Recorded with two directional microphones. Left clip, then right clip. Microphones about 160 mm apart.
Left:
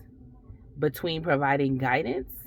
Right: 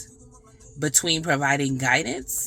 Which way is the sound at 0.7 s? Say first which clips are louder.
Right 4 dB; 20° right (ahead or behind).